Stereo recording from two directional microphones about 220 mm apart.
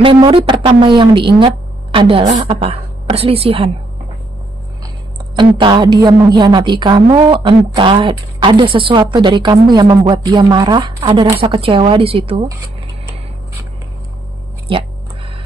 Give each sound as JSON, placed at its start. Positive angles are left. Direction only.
{"t": 0.0, "sound": "a woman's voice", "side_deg": -20}
{"t": 5.6, "sound": "a woman's voice", "side_deg": -20}